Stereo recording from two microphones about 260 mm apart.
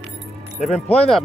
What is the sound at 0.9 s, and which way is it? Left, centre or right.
Speech, centre.